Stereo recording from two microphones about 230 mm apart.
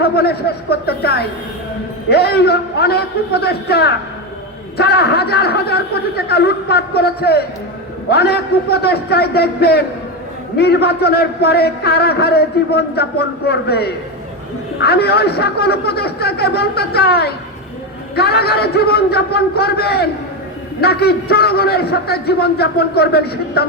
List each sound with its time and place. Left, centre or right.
0.0 s a man's voice: left